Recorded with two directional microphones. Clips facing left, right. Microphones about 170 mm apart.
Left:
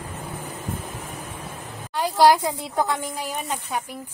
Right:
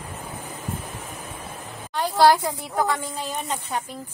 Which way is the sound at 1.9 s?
10° left (ahead or behind).